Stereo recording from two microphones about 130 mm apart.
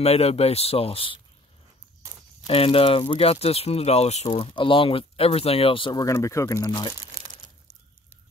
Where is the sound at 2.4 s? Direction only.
45° left (ahead or behind).